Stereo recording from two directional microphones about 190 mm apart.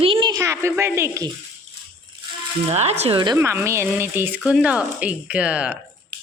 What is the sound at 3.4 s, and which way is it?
Speech, 10° right (ahead or behind).